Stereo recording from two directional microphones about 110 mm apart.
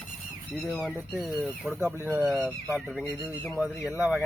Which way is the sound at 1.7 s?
20° right (ahead or behind).